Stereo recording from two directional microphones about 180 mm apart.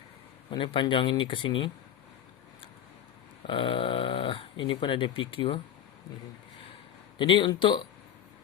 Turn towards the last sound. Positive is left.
turn(degrees=25)  # may be behind; listen again after turning